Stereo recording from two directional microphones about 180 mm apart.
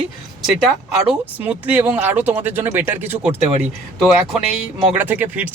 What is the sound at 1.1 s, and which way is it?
Speech, 5° right (ahead or behind).